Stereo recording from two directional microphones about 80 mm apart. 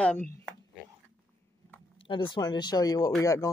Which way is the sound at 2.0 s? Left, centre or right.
Left.